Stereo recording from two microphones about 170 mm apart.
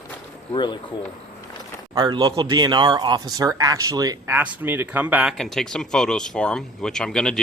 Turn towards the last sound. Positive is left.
turn(degrees=5)  # may be behind; listen again after turning